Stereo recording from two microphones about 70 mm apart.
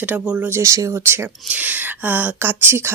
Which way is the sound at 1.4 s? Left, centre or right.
Right.